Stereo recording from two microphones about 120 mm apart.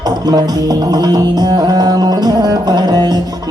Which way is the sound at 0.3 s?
35° right (ahead or behind).